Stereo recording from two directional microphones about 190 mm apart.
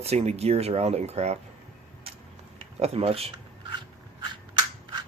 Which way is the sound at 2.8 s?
30° right (ahead or behind).